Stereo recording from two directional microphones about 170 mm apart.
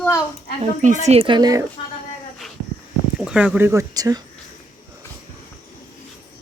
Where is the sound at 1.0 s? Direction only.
35° right (ahead or behind).